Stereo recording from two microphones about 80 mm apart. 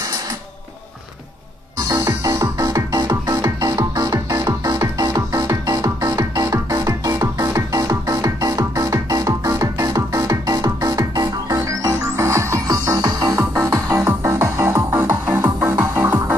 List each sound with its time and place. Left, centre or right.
1.9 s music: right
12.6 s music: right
13.4 s music: right
15.0 s music: right